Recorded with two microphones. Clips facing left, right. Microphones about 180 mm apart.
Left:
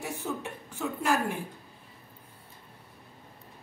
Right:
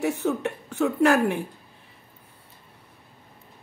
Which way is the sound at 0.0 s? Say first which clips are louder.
Right 10 dB; 70° right (ahead or behind).